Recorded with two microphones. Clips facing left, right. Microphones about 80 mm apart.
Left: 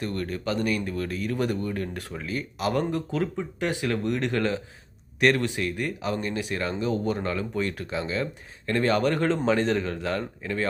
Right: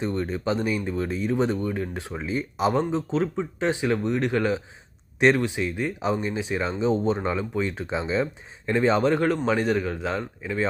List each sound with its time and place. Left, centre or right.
0.0 s speech: centre